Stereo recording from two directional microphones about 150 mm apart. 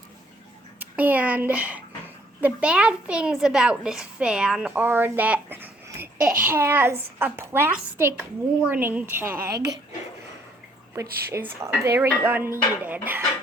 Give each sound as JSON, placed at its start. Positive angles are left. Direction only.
{"t": 0.8, "sound": "a child's voice", "side_deg": -10}
{"t": 10.9, "sound": "a woman's voice", "side_deg": -20}